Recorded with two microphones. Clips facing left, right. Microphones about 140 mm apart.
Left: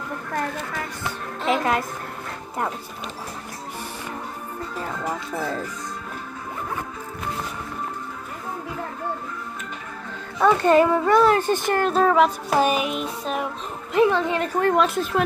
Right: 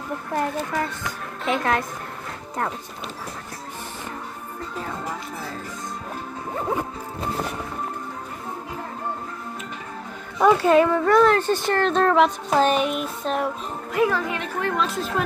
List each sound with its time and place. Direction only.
1.4 s speech: 5° left (ahead or behind)
10.4 s speech: 5° right (ahead or behind)
11.3 s speech: 15° left (ahead or behind)
13.9 s a woman's voice: 25° left (ahead or behind)
14.4 s a woman's voice: 50° left (ahead or behind)